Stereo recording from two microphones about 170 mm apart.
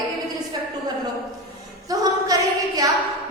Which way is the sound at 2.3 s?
20° right (ahead or behind).